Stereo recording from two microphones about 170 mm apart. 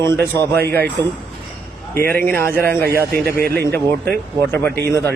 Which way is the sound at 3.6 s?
10° left (ahead or behind).